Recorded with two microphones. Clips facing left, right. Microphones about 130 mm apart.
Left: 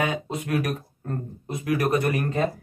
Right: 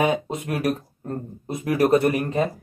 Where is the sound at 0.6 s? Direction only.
30° right (ahead or behind).